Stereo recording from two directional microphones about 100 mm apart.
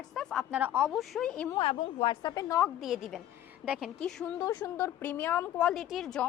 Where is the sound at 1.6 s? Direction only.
65° left (ahead or behind); by 2.5 s 40° left (ahead or behind).